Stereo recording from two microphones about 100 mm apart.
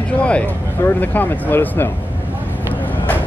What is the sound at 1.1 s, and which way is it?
Speech, 20° left (ahead or behind).